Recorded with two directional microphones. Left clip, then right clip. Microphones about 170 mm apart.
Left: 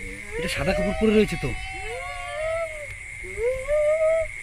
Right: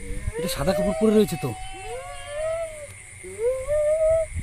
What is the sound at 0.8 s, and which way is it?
Speech, centre (ahead or behind).